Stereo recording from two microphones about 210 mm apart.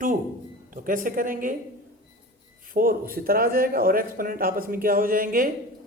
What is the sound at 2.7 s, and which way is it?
Speech, 40° right (ahead or behind).